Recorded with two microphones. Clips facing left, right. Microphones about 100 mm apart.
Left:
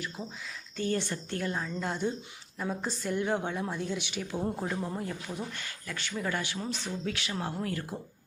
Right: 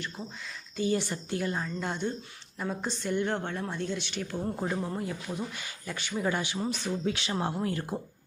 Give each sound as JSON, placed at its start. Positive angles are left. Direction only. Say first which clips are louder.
{"t": 0.8, "sound": "a woman's voice", "louder": "right 2 dB", "side_deg": -10}
{"t": 4.5, "sound": "a woman's voice", "louder": "right 2 dB", "side_deg": -5}
{"t": 5.5, "sound": "speech", "louder": "right 1 dB", "side_deg": -15}